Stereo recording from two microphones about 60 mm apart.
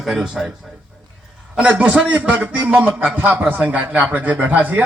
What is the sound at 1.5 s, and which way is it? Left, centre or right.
A man's voice, right.